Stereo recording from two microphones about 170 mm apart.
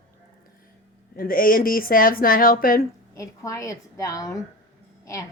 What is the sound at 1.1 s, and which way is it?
Speech, 55° left (ahead or behind).